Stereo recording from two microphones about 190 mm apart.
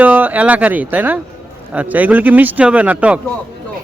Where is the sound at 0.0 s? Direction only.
10° right (ahead or behind).